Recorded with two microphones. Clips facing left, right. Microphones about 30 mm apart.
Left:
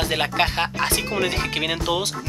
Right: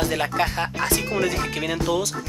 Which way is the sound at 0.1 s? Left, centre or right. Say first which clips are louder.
Left 2 dB; left.